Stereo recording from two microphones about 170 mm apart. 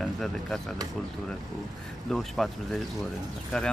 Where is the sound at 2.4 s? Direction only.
Centre (ahead or behind).